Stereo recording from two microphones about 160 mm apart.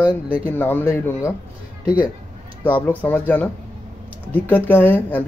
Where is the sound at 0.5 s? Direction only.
15° left (ahead or behind).